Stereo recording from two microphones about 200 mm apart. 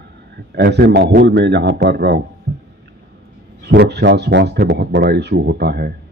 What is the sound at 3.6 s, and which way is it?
Speech, 55° right (ahead or behind).